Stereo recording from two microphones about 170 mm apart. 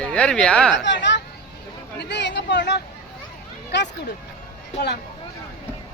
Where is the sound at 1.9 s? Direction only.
90° left.